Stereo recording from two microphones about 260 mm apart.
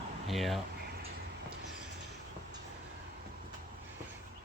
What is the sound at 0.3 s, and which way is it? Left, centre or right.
Speech, centre.